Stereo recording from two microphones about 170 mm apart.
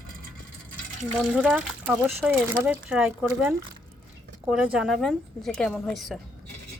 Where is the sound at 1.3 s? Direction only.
5° right (ahead or behind).